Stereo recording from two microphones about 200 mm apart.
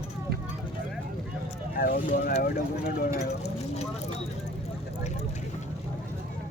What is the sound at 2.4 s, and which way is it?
Speech, 55° left (ahead or behind).